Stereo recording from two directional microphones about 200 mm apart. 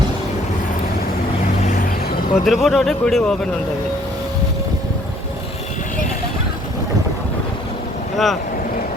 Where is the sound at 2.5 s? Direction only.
Centre (ahead or behind).